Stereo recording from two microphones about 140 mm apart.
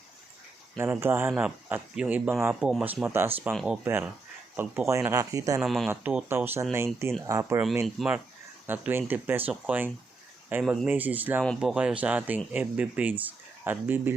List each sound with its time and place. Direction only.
0.8 s speech: 20° right (ahead or behind)
3.5 s speech: centre (ahead or behind)
4.5 s speech: 15° right (ahead or behind)
5.5 s speech: centre (ahead or behind); by 7.6 s 20° right (ahead or behind)
7.9 s speech: 5° right (ahead or behind)